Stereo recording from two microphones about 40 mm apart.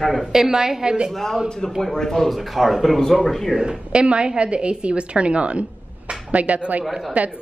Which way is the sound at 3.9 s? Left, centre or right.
Right.